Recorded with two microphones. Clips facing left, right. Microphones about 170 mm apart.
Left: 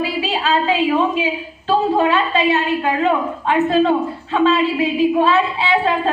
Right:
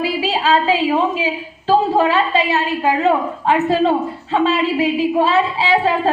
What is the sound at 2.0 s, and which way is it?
A woman's voice, 30° right (ahead or behind).